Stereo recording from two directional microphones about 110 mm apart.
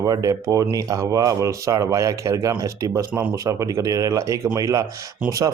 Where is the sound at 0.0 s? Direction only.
30° right (ahead or behind).